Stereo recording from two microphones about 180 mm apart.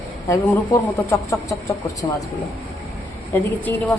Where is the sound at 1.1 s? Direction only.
15° left (ahead or behind).